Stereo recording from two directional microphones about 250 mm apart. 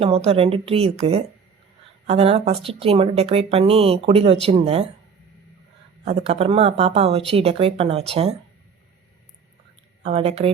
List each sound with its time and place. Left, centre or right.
0.0 s speech: right
6.1 s speech: right
10.0 s speech: right